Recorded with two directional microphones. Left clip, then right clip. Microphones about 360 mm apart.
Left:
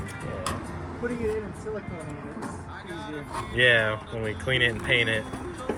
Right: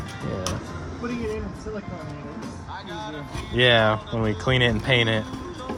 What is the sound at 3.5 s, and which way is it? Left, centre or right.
Speech, right.